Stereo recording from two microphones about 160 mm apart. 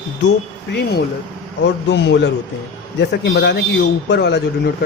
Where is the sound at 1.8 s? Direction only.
90° left.